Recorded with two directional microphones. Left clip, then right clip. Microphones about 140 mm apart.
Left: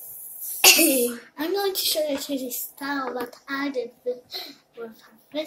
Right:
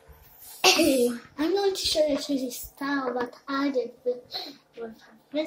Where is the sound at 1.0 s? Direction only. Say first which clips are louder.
Right 1 dB; 15° right (ahead or behind).